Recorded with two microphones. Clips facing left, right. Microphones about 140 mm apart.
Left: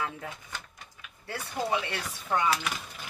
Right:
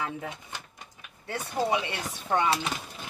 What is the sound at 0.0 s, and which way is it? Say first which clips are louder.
Speech: right 2 dB; 20° right (ahead or behind).